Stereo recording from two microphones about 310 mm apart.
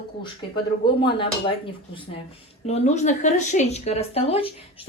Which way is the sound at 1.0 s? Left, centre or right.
Centre.